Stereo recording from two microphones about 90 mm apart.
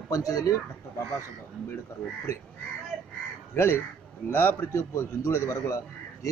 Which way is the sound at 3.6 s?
30° left (ahead or behind).